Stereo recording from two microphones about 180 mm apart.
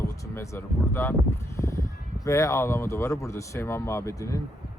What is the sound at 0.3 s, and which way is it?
Speech, 15° left (ahead or behind).